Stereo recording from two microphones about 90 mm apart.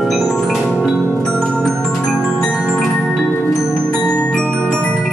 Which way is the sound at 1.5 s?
5° left (ahead or behind).